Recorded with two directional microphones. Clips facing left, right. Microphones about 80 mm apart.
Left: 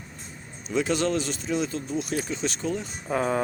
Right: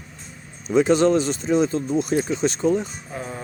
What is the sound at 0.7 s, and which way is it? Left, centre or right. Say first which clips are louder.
Speech: right 8 dB; right.